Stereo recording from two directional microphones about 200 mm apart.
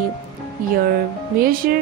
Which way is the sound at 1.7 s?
50° right (ahead or behind).